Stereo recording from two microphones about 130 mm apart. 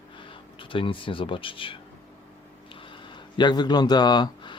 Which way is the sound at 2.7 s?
40° left (ahead or behind).